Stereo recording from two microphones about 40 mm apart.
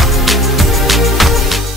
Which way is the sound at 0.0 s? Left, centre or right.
Centre.